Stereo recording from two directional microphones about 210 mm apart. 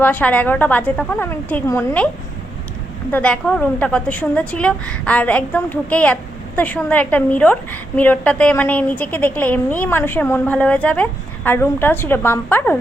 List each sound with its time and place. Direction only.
0.0 s a woman's voice: 10° left (ahead or behind)
3.1 s a woman's voice: 5° left (ahead or behind)